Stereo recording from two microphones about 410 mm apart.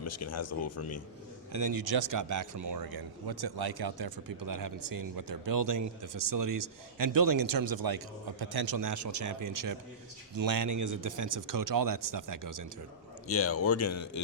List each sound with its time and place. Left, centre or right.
0.0 s speech: left
1.5 s speech: right
2.2 s speech: right
13.2 s speech: left